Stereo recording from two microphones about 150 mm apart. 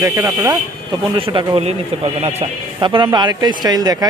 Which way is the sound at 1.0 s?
30° right (ahead or behind).